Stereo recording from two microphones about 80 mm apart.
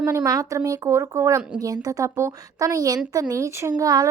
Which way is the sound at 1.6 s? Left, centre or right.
Right.